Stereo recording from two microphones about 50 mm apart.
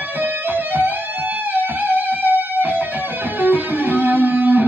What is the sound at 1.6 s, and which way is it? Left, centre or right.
Music, right.